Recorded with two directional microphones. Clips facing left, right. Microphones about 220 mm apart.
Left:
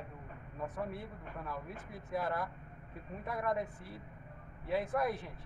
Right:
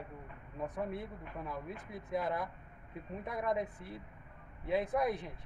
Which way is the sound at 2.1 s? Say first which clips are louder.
Right 1 dB; 20° right (ahead or behind).